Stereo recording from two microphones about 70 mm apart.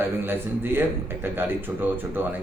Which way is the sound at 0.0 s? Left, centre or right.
Right.